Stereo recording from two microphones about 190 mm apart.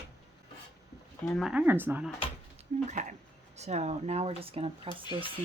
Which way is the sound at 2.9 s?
40° right (ahead or behind).